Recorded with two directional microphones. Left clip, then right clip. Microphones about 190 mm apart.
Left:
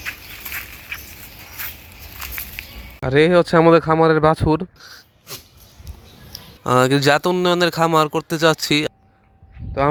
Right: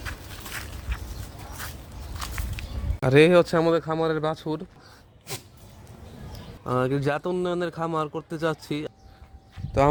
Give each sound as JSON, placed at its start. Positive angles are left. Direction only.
{"t": 2.3, "sound": "speech", "side_deg": 0}
{"t": 6.7, "sound": "speech", "side_deg": 20}